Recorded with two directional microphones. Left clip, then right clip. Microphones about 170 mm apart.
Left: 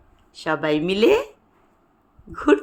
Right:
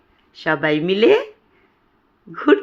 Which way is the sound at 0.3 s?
15° right (ahead or behind).